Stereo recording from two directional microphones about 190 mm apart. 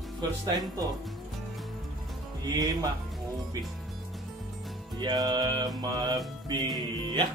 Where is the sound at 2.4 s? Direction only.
20° right (ahead or behind).